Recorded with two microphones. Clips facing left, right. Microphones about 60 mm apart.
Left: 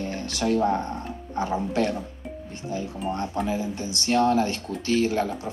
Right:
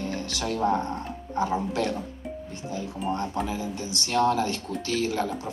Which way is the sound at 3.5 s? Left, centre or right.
Left.